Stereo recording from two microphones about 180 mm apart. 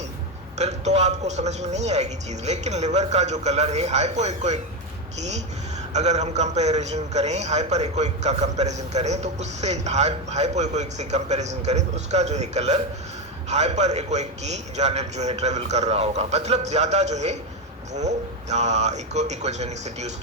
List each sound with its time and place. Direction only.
0.6 s a man's voice: 40° right (ahead or behind)
5.9 s a man's voice: 40° right (ahead or behind)